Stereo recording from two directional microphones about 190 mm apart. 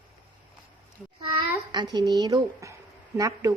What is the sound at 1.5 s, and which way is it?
A woman's voice, 25° right (ahead or behind).